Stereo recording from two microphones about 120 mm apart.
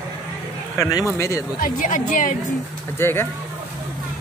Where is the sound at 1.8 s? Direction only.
90° left.